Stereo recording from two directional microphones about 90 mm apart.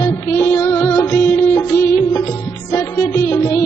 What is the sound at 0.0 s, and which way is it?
Music, 25° left (ahead or behind).